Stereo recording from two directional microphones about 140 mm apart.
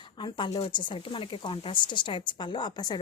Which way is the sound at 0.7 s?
35° left (ahead or behind).